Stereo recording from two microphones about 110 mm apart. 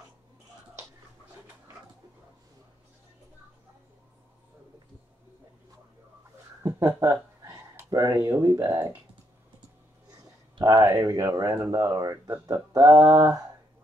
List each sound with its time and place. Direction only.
7.0 s a sound: 35° right (ahead or behind)
7.7 s speech: 30° right (ahead or behind)
10.6 s speech: 30° right (ahead or behind)